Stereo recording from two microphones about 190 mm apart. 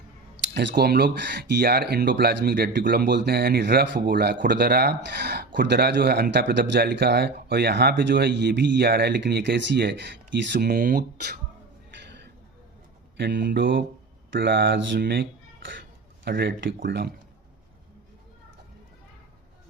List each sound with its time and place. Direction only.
0.5 s a man's voice: 55° right (ahead or behind)
13.1 s a man's voice: 60° right (ahead or behind)